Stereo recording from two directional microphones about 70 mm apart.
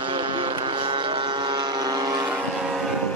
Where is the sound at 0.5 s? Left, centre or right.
Right.